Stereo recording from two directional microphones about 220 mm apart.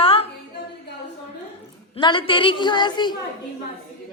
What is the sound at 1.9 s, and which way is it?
A woman's voice, 20° left (ahead or behind).